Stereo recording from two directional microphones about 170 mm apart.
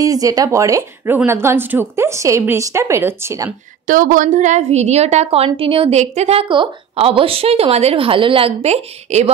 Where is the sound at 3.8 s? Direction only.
50° right (ahead or behind).